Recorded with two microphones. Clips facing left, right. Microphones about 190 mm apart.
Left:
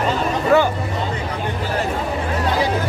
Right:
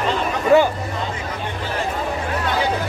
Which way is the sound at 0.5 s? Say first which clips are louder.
Right 2 dB; 15° right (ahead or behind).